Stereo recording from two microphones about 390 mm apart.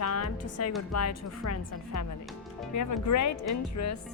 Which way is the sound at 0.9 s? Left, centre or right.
Left.